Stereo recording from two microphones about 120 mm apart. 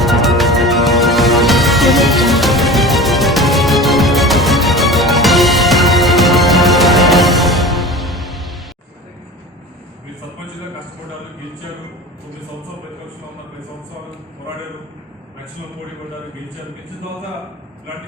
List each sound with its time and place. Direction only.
0.0 s music: centre (ahead or behind)